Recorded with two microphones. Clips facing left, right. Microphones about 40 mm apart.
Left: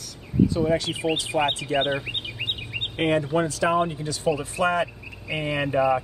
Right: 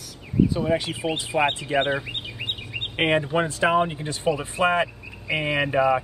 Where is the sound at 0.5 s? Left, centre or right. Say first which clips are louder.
Left 1 dB; centre.